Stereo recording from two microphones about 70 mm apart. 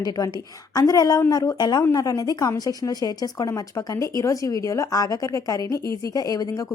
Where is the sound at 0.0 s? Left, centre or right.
Left.